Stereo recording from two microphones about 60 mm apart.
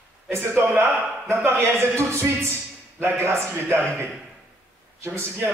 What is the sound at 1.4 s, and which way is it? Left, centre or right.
A man's voice, right.